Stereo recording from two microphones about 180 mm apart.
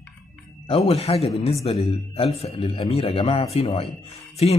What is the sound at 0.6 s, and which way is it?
Speech, 30° left (ahead or behind).